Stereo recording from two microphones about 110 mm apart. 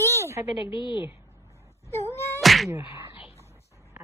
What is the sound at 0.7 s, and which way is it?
Speech, 45° left (ahead or behind).